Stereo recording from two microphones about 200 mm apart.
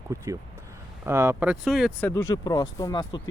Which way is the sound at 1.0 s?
10° right (ahead or behind).